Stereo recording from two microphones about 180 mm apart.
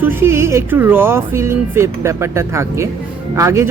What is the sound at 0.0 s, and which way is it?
Speech, 15° right (ahead or behind).